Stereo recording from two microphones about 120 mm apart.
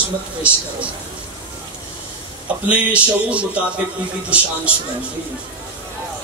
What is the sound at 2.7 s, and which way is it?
Speech, 10° right (ahead or behind).